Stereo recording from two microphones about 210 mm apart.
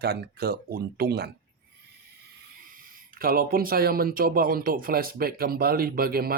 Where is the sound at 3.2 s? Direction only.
45° right (ahead or behind).